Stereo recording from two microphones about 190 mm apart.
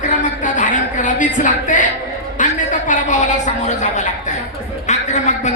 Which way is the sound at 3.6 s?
40° left (ahead or behind).